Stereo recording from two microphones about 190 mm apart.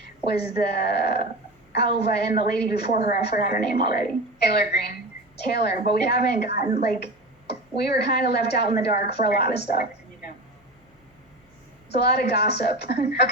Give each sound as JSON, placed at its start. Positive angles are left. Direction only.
{"t": 0.0, "sound": "a sound", "side_deg": 60}
{"t": 0.5, "sound": "a woman's voice", "side_deg": 60}
{"t": 11.9, "sound": "a woman's voice", "side_deg": 60}